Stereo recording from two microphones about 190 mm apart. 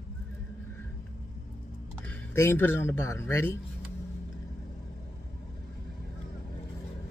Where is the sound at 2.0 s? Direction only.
15° left (ahead or behind).